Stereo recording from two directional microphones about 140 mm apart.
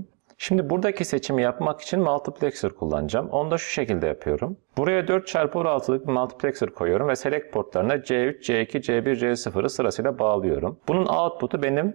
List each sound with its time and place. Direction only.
0.4 s speech: 20° right (ahead or behind)